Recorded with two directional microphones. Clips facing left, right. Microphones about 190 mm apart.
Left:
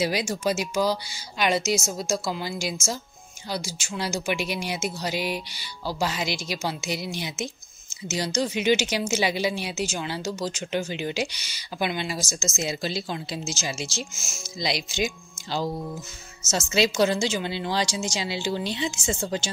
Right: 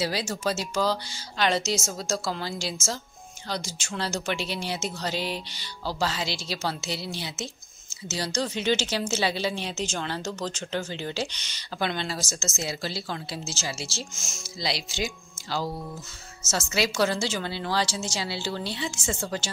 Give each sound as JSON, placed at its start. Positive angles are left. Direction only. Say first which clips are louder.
{"t": 0.0, "sound": "a woman's voice", "louder": "left 3 dB", "side_deg": 15}